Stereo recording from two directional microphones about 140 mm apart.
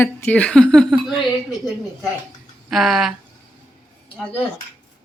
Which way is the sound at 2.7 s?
Centre (ahead or behind).